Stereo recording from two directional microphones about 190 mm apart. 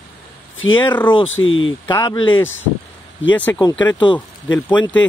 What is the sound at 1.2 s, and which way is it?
Speech, 90° left.